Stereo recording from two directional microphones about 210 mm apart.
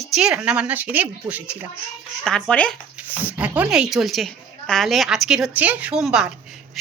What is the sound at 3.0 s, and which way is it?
A woman's voice, 10° right (ahead or behind).